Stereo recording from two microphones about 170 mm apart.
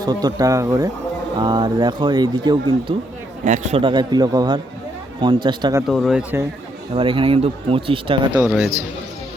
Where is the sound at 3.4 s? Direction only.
45° right (ahead or behind).